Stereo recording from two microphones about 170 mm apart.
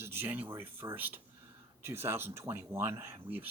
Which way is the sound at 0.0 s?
15° right (ahead or behind).